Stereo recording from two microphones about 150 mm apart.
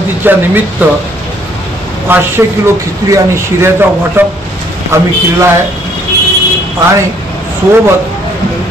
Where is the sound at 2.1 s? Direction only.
15° right (ahead or behind).